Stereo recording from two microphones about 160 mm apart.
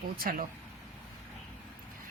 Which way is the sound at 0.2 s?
60° right (ahead or behind).